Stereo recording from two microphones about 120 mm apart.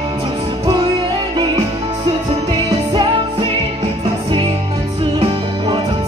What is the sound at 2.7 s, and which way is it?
Music, 40° right (ahead or behind).